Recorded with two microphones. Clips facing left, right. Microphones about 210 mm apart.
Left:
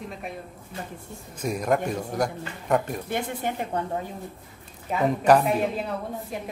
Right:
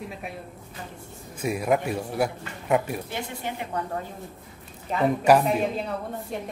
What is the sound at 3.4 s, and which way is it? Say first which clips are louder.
Speech: left 2 dB; 50° left (ahead or behind).